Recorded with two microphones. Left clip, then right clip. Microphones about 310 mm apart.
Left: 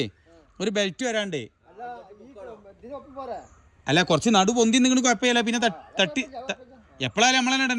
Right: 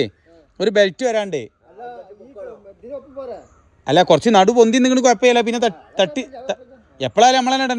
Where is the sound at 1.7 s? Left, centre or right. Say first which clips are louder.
Right 3 dB; centre.